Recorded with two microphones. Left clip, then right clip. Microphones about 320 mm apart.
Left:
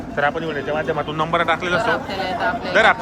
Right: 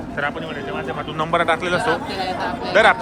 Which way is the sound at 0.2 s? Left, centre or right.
Centre.